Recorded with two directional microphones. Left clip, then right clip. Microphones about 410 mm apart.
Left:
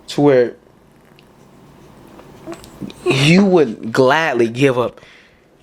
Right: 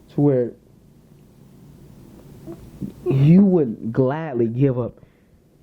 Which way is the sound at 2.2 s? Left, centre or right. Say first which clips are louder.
Left 7 dB; centre.